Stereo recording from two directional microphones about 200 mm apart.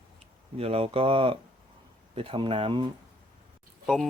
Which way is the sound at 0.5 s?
30° right (ahead or behind).